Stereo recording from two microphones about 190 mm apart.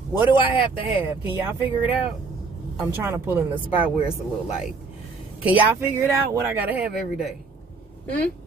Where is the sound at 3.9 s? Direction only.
30° left (ahead or behind).